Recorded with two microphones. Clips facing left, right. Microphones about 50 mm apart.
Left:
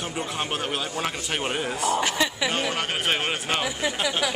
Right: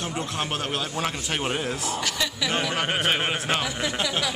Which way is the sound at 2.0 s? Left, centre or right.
Left.